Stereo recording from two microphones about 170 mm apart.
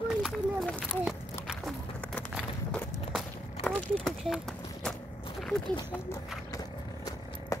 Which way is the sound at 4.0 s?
Centre (ahead or behind).